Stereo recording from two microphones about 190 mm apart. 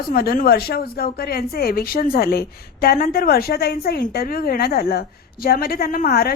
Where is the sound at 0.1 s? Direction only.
50° left (ahead or behind).